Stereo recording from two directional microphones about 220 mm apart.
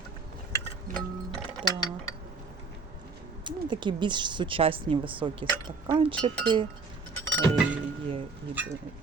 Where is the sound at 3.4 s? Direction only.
20° right (ahead or behind).